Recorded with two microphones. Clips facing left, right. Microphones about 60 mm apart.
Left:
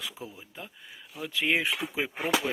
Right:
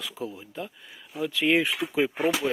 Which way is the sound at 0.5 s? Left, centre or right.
Centre.